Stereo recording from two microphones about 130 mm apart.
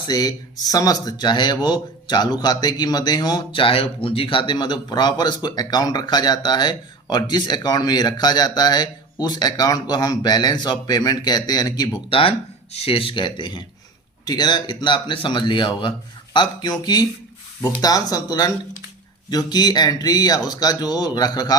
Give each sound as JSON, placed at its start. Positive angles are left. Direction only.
{"t": 0.1, "sound": "speech", "side_deg": 30}
{"t": 12.7, "sound": "speech", "side_deg": 50}